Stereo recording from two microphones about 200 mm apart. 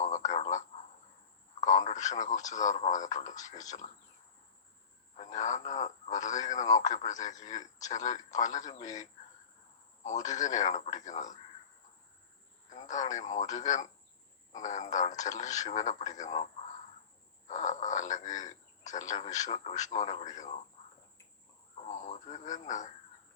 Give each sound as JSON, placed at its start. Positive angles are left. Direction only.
{"t": 0.0, "sound": "telephone", "side_deg": 35}
{"t": 1.6, "sound": "speech", "side_deg": 40}
{"t": 5.1, "sound": "speech", "side_deg": 40}
{"t": 12.9, "sound": "speech", "side_deg": 40}
{"t": 21.8, "sound": "speech", "side_deg": 35}